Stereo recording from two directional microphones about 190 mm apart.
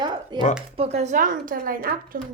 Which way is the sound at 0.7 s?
35° right (ahead or behind).